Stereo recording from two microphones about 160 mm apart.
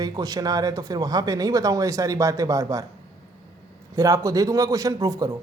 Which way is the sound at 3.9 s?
20° right (ahead or behind).